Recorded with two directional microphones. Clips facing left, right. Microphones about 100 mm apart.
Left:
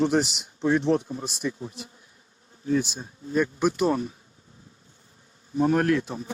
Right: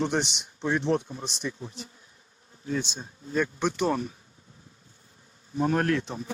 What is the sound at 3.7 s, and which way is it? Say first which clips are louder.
Speech: left 3 dB; 30° left (ahead or behind).